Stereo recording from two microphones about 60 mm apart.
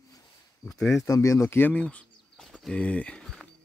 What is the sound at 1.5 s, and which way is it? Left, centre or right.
Speech, left.